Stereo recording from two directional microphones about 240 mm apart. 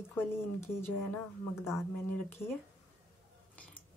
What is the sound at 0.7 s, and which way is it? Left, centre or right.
Speech, centre.